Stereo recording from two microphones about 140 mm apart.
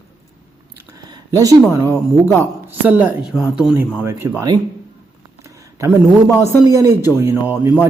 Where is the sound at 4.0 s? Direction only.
15° right (ahead or behind).